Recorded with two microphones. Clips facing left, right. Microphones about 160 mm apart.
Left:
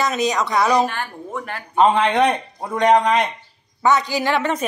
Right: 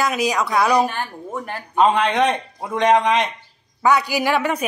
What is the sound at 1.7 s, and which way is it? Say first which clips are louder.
Speech: left 1 dB; 15° left (ahead or behind).